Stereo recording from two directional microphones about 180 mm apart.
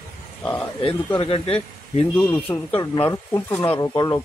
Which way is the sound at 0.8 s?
25° left (ahead or behind).